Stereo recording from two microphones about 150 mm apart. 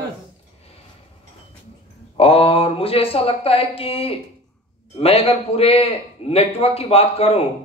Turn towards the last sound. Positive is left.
turn(degrees=40)  # may be behind; listen again after turning